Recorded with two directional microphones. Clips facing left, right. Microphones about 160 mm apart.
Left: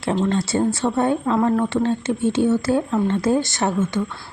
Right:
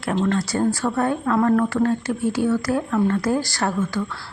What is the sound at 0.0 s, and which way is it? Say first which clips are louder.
Speech: left 1 dB; 25° left (ahead or behind).